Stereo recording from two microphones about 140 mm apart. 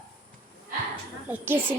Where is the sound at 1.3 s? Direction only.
15° right (ahead or behind).